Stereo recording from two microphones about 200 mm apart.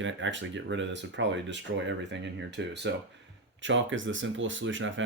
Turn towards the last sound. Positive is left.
turn(degrees=-70)  # may be behind; listen again after turning